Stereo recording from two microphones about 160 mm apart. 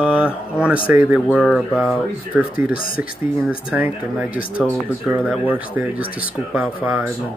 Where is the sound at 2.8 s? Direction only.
65° left (ahead or behind).